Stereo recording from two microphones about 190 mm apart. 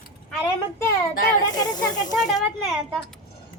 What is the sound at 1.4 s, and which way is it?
Speech, 20° left (ahead or behind).